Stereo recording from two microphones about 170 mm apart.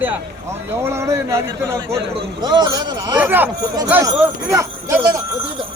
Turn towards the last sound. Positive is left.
turn(degrees=-15)  # may be behind; listen again after turning